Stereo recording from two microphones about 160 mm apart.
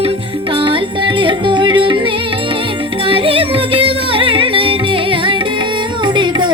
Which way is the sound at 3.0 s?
35° right (ahead or behind).